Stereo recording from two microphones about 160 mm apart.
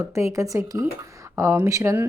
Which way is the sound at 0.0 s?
20° right (ahead or behind).